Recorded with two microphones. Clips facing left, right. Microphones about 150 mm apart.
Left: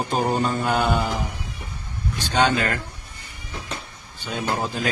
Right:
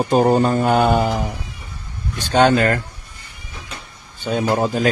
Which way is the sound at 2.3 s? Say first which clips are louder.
Right 7 dB; 50° right (ahead or behind).